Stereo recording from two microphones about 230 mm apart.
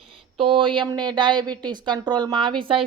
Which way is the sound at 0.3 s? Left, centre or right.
Right.